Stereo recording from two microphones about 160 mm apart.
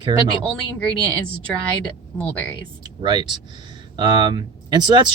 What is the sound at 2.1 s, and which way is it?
Speech, 10° left (ahead or behind).